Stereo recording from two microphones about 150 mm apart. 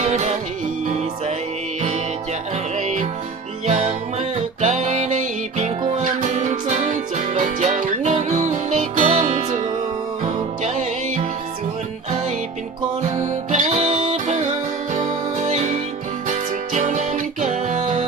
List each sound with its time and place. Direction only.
0.0 s music: 50° right (ahead or behind)
2.7 s music: 55° right (ahead or behind)
10.6 s music: 55° right (ahead or behind)
13.1 s music: 55° right (ahead or behind)